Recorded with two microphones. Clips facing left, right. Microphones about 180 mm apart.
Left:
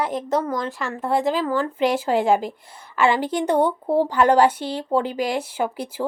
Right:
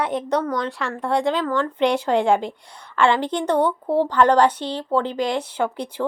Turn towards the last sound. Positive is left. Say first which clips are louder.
# right 1 dB
turn(degrees=5)  # may be behind; listen again after turning